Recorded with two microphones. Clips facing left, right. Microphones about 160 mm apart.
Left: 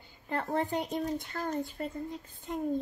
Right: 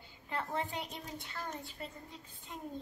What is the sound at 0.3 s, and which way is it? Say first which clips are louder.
Speech: left 7 dB; 50° left (ahead or behind).